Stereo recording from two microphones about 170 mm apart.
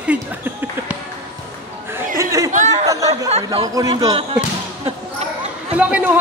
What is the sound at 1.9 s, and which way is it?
Chatter, 15° right (ahead or behind).